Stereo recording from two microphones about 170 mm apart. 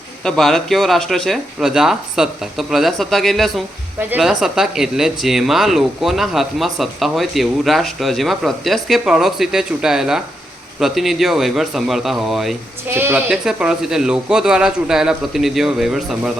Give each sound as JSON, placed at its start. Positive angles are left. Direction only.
{"t": 0.3, "sound": "speech", "side_deg": 0}
{"t": 12.9, "sound": "speech", "side_deg": -10}